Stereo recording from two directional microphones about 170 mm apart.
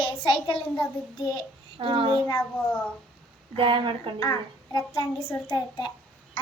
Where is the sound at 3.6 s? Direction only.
30° right (ahead or behind).